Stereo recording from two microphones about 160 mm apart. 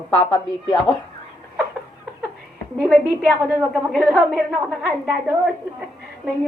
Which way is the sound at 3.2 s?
5° right (ahead or behind).